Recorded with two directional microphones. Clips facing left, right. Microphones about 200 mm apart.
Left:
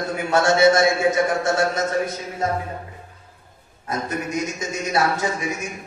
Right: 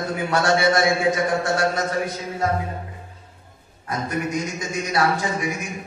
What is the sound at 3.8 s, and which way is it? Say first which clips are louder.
A man's voice: right 1 dB; 25° left (ahead or behind).